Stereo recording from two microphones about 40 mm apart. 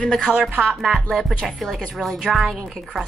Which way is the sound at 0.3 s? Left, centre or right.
Centre.